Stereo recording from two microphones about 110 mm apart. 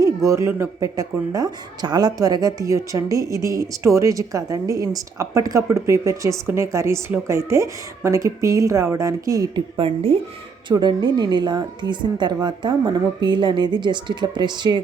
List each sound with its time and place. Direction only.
0.0 s a woman's voice: 30° right (ahead or behind)
9.7 s speech: 65° right (ahead or behind)
10.7 s a woman's voice: 45° right (ahead or behind)